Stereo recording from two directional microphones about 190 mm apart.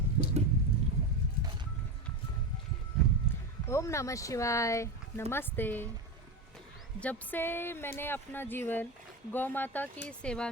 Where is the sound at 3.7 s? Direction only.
15° left (ahead or behind).